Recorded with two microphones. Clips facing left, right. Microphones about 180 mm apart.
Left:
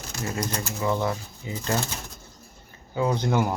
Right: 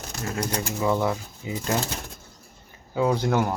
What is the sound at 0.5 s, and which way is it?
Speech, 10° right (ahead or behind).